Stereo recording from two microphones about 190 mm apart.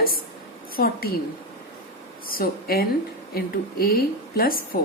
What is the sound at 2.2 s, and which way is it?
Speech, 50° left (ahead or behind).